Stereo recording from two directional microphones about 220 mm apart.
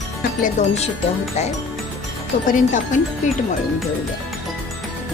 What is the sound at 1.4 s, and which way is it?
Speech, 30° left (ahead or behind).